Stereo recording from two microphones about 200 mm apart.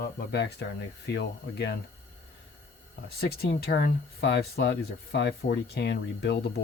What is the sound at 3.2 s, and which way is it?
Speech, 50° left (ahead or behind).